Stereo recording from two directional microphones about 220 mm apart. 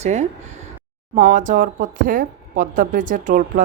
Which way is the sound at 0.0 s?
30° right (ahead or behind).